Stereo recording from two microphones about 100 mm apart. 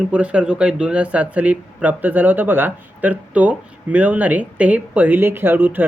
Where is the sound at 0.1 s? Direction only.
10° right (ahead or behind).